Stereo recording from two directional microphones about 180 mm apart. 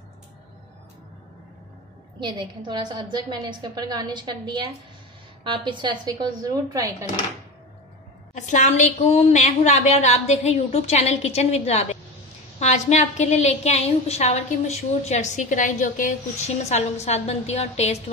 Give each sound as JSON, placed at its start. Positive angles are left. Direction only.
{"t": 2.1, "sound": "a woman's voice", "side_deg": -25}
{"t": 5.4, "sound": "a woman's voice", "side_deg": -25}
{"t": 8.4, "sound": "a woman's voice", "side_deg": 40}